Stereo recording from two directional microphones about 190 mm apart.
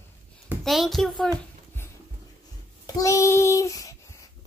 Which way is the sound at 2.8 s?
15° left (ahead or behind).